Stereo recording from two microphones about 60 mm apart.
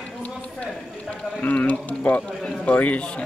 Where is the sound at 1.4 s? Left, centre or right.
Left.